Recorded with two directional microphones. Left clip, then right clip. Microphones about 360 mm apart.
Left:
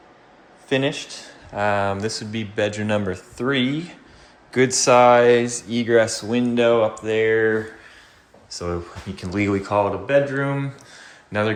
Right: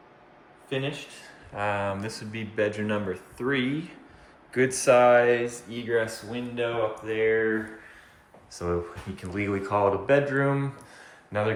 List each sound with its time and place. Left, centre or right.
0.7 s speech: centre
8.5 s speech: centre